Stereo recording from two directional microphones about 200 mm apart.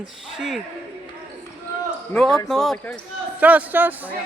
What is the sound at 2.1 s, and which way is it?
Speech, centre (ahead or behind).